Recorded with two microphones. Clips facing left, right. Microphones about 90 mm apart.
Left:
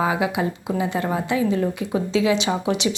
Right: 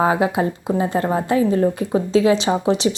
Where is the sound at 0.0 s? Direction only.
40° right (ahead or behind).